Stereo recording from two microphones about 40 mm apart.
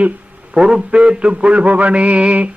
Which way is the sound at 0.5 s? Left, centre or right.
Right.